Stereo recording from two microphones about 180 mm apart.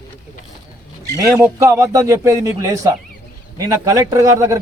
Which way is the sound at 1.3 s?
15° right (ahead or behind).